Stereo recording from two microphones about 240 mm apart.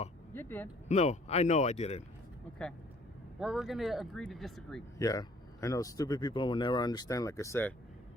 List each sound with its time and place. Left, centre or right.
0.3 s speech: centre
0.9 s speech: left
3.4 s speech: centre
4.9 s speech: centre